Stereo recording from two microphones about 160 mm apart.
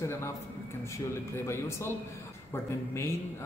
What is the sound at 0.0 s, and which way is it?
Speech, 15° left (ahead or behind).